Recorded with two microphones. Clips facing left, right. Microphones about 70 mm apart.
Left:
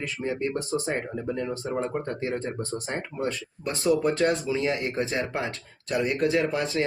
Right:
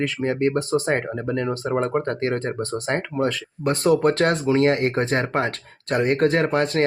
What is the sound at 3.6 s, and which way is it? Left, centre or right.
Speech, right.